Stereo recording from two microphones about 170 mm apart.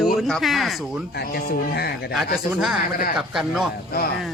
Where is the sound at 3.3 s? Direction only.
5° right (ahead or behind).